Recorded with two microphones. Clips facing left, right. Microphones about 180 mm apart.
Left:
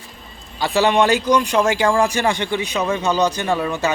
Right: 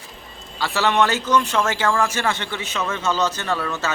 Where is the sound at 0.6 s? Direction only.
15° left (ahead or behind).